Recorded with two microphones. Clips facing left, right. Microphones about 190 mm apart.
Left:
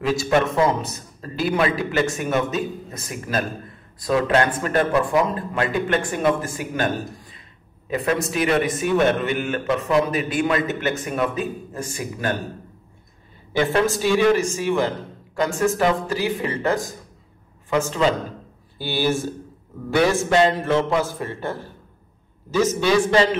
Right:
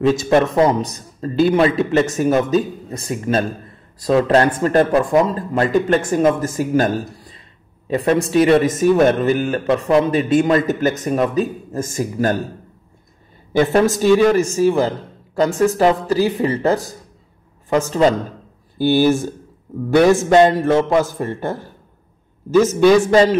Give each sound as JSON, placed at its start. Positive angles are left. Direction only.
{"t": 0.0, "sound": "a man's voice", "side_deg": -35}
{"t": 2.0, "sound": "speech", "side_deg": -35}
{"t": 13.5, "sound": "a man's voice", "side_deg": -45}